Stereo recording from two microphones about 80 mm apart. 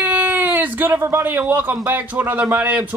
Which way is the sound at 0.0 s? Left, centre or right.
Right.